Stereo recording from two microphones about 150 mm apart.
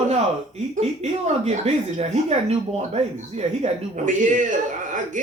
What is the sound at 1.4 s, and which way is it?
Speech, 45° right (ahead or behind).